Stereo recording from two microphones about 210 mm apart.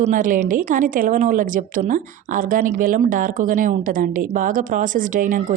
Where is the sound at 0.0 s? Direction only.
40° right (ahead or behind).